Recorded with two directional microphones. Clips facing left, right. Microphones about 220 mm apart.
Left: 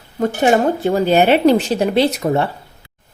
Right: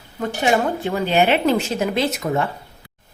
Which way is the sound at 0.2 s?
40° left (ahead or behind).